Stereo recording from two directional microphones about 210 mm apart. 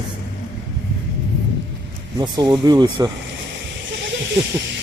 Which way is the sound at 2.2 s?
20° right (ahead or behind).